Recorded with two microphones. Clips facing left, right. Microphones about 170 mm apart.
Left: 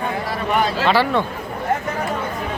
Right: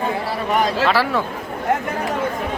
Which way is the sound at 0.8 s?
Centre (ahead or behind).